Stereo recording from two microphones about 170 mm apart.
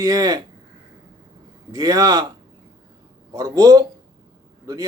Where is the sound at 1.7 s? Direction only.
20° right (ahead or behind).